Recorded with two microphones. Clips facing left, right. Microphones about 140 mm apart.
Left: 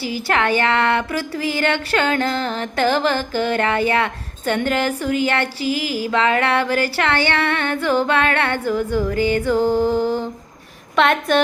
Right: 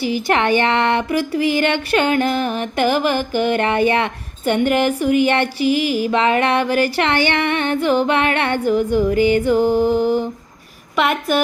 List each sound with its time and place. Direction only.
0.0 s speech: 15° right (ahead or behind)
10.9 s a woman's voice: 5° right (ahead or behind)